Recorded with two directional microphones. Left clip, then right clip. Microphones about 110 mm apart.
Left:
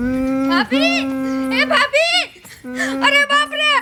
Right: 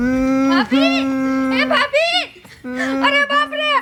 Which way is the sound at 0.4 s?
55° left (ahead or behind).